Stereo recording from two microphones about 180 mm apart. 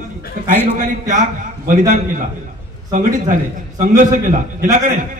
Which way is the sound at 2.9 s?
45° right (ahead or behind).